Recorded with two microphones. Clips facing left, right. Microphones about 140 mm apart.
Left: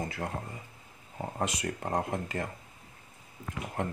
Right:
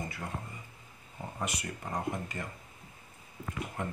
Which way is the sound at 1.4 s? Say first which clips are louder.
Left 5 dB; 90° left.